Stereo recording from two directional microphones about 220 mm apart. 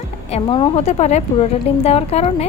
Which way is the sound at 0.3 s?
25° left (ahead or behind).